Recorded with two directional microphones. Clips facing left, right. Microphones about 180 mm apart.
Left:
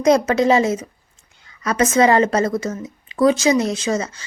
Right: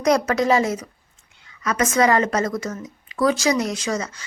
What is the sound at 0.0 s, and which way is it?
A woman's voice, 25° left (ahead or behind).